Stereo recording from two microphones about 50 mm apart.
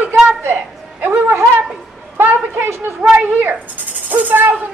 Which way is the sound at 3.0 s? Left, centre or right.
Right.